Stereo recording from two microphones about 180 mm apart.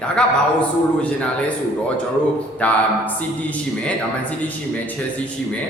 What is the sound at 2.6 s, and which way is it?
Speech, 10° left (ahead or behind).